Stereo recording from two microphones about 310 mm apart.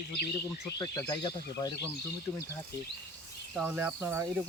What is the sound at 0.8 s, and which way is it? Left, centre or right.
Speech, centre.